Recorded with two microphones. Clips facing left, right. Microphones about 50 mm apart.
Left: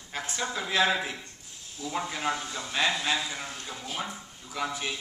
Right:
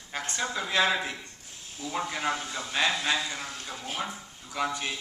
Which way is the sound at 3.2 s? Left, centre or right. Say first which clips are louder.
Right 1 dB; centre.